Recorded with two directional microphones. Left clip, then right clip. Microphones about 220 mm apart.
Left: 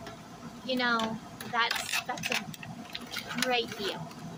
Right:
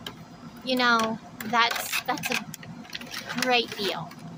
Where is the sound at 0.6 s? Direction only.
35° right (ahead or behind).